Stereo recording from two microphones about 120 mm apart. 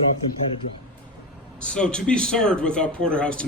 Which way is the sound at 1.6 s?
10° left (ahead or behind).